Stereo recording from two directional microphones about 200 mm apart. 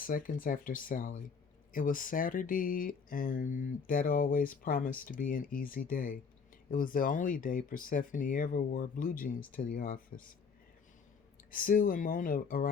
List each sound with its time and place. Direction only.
0.0 s speech: 40° left (ahead or behind)
11.5 s speech: 45° left (ahead or behind)